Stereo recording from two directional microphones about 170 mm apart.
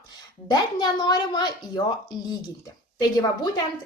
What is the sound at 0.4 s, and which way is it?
Speech, 25° left (ahead or behind).